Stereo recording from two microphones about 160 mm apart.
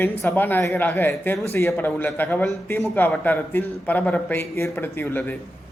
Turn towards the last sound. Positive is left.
turn(degrees=10)  # may be behind; listen again after turning